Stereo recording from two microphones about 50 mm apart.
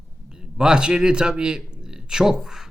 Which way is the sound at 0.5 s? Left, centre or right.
Centre.